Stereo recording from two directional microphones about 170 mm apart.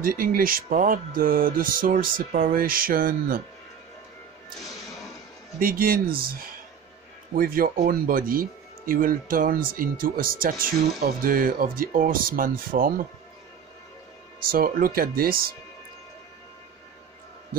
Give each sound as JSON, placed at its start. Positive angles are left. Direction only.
{"t": 0.0, "sound": "speech", "side_deg": -60}
{"t": 5.6, "sound": "speech", "side_deg": -55}
{"t": 14.4, "sound": "speech", "side_deg": -60}